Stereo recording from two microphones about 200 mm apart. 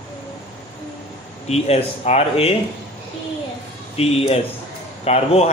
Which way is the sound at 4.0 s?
30° left (ahead or behind).